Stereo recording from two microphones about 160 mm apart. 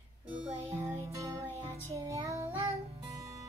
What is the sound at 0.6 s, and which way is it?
Music, 15° right (ahead or behind).